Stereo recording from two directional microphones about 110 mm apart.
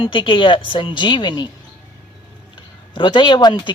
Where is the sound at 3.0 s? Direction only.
45° left (ahead or behind).